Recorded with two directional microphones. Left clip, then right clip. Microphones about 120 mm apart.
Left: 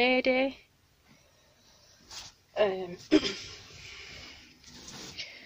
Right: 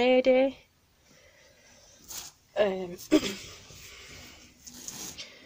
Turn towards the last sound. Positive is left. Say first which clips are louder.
# left 3 dB
turn(degrees=-20)  # may be behind; listen again after turning